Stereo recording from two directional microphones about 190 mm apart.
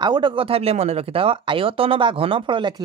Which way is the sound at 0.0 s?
25° right (ahead or behind).